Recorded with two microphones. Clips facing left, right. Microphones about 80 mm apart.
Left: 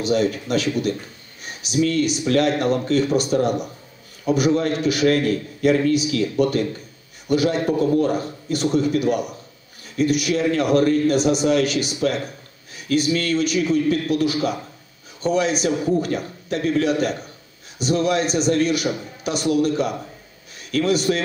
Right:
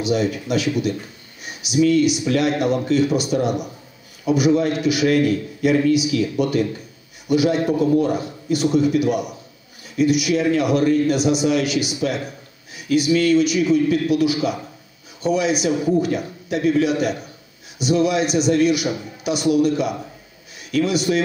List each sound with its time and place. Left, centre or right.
0.0 s a man's voice: left
15.6 s a man's voice: left